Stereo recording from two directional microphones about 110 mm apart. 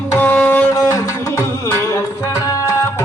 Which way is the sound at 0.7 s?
30° left (ahead or behind).